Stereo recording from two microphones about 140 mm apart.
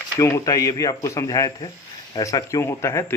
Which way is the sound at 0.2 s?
20° left (ahead or behind).